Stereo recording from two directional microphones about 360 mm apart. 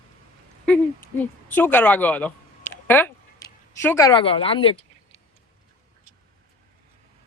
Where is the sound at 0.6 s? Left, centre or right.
Centre.